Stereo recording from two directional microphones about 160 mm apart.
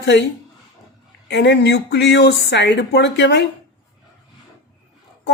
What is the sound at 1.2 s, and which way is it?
Speech, 90° left.